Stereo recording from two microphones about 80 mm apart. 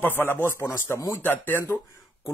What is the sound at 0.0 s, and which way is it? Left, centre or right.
Speech, left.